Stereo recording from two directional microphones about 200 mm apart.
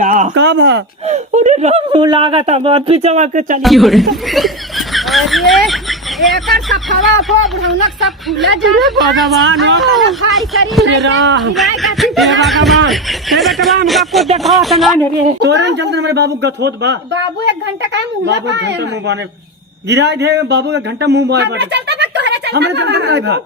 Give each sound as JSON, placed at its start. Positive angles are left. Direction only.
{"t": 0.0, "sound": "a sound", "side_deg": -40}
{"t": 0.3, "sound": "speech", "side_deg": -60}
{"t": 1.0, "sound": "speech", "side_deg": -35}
{"t": 3.6, "sound": "speech", "side_deg": 0}
{"t": 4.9, "sound": "a sound", "side_deg": 0}
{"t": 6.1, "sound": "speech", "side_deg": 0}
{"t": 10.8, "sound": "a man's voice", "side_deg": -65}
{"t": 11.5, "sound": "speech", "side_deg": 0}
{"t": 15.4, "sound": "speech", "side_deg": -60}